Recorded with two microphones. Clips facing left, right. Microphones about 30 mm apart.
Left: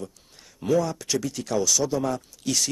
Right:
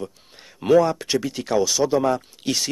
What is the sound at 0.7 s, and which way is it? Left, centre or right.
Speech, right.